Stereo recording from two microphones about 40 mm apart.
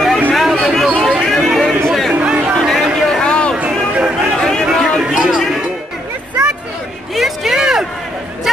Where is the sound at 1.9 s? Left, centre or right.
Centre.